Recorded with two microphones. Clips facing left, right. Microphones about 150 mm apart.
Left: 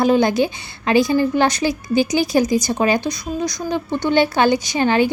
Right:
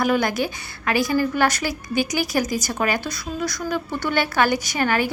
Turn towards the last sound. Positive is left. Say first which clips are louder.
# left 5 dB
turn(degrees=25)  # may be behind; listen again after turning